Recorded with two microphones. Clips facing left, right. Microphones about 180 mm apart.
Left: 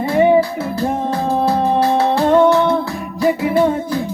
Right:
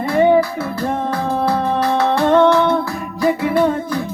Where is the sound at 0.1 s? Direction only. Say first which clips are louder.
Even; 15° left (ahead or behind).